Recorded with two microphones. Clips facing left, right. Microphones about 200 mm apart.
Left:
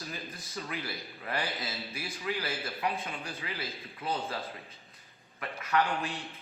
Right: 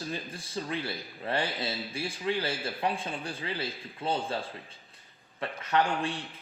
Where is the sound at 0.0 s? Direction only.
30° right (ahead or behind).